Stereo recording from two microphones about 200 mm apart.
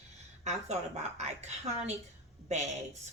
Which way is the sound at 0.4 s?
35° right (ahead or behind).